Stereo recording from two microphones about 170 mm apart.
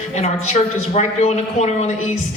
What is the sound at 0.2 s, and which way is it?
A man's voice, 40° left (ahead or behind).